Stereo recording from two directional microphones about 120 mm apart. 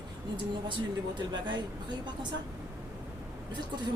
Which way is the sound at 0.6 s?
40° right (ahead or behind).